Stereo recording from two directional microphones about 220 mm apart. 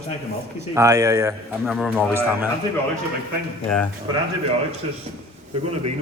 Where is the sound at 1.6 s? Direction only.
Centre (ahead or behind).